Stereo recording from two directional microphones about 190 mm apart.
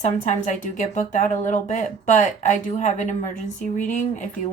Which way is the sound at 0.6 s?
40° left (ahead or behind).